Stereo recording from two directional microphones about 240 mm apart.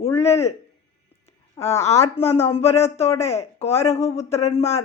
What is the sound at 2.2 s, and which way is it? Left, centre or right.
Speech, left.